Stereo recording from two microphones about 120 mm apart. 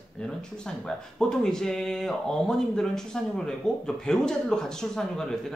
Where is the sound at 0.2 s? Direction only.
5° left (ahead or behind).